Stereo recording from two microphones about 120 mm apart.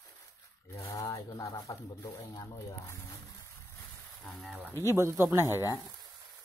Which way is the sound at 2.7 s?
25° left (ahead or behind).